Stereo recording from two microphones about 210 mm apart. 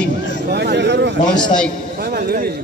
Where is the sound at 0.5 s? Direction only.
50° right (ahead or behind).